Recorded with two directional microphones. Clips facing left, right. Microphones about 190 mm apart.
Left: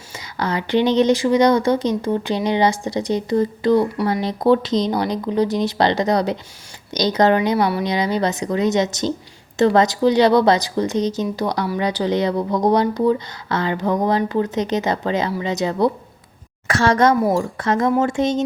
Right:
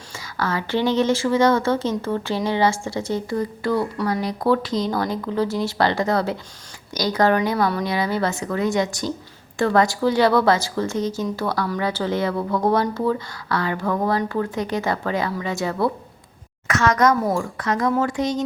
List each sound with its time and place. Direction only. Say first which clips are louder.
0.1 s speech: left 2 dB; 20° left (ahead or behind)
16.6 s speech: left 2 dB; 30° left (ahead or behind)